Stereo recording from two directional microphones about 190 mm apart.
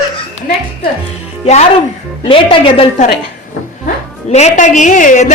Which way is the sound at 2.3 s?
30° left (ahead or behind).